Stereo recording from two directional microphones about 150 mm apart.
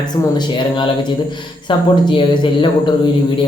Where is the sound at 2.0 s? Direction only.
35° left (ahead or behind).